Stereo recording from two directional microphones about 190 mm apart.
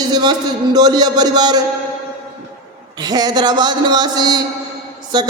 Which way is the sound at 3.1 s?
20° right (ahead or behind).